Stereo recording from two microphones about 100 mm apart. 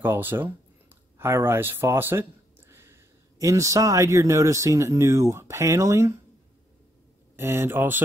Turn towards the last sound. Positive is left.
turn(degrees=-20)  # may be behind; listen again after turning